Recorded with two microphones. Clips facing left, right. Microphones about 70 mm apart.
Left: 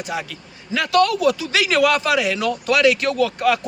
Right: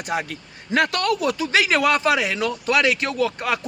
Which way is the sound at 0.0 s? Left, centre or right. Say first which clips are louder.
Right 1 dB; right.